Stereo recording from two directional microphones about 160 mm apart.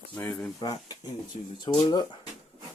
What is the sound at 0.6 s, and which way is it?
Speech, 25° left (ahead or behind).